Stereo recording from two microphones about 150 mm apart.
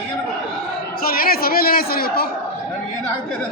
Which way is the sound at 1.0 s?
80° left.